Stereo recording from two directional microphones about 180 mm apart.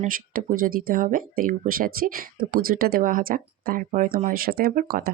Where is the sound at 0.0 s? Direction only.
50° right (ahead or behind).